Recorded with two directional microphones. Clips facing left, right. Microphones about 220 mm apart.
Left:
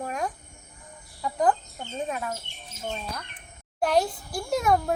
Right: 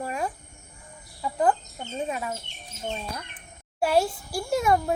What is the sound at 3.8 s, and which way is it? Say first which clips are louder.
Speech: right 1 dB; 5° right (ahead or behind).